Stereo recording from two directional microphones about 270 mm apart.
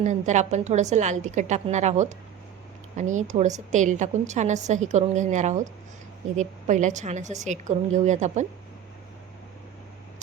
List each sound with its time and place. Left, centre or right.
0.0 s a woman's voice: right